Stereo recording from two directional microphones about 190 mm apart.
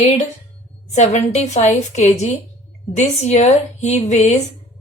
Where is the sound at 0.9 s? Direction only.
35° left (ahead or behind).